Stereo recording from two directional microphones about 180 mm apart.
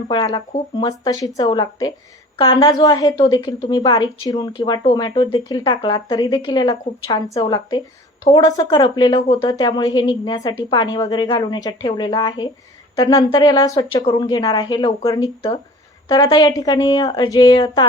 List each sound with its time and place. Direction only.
0.1 s a woman's voice: 25° left (ahead or behind)